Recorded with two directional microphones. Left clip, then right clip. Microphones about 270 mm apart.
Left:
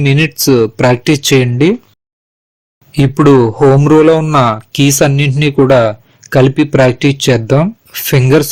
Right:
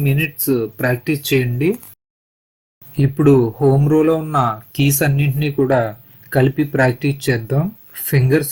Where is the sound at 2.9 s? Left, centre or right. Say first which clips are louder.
Left 6 dB; left.